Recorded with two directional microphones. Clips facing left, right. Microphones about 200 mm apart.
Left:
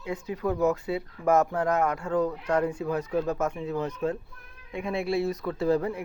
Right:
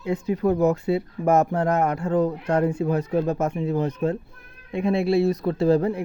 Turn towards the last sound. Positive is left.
turn(degrees=-30)  # may be behind; listen again after turning